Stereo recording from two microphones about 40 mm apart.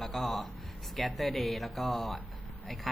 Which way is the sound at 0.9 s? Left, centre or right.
Centre.